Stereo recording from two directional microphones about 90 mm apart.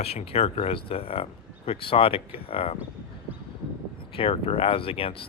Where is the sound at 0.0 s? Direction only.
90° left.